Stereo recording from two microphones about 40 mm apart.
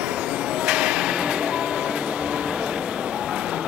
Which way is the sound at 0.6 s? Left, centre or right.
Right.